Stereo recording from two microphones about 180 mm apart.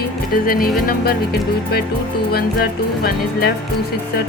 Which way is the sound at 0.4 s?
55° left (ahead or behind).